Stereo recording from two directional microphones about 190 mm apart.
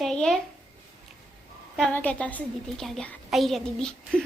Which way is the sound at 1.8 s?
5° left (ahead or behind).